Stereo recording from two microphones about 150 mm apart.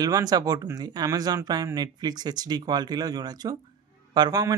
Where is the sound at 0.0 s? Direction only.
25° right (ahead or behind).